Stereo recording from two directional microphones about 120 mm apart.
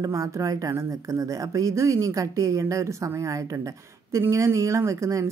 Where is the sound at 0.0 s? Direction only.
25° right (ahead or behind).